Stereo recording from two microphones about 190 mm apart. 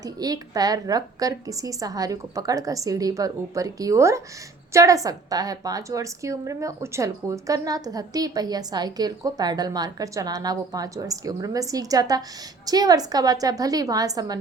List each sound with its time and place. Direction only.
0.0 s a woman's voice: 20° right (ahead or behind)